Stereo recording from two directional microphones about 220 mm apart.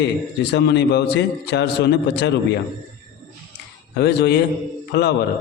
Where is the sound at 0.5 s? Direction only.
50° left (ahead or behind).